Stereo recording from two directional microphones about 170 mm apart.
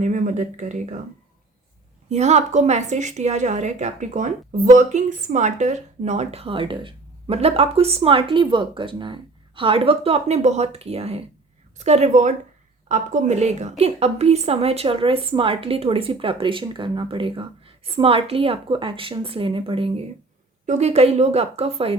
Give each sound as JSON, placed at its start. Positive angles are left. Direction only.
{"t": 0.0, "sound": "speech", "side_deg": -45}
{"t": 2.0, "sound": "a woman's voice", "side_deg": -40}